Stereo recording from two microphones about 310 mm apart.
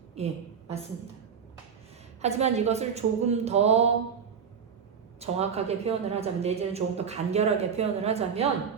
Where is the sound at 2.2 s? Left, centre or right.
Right.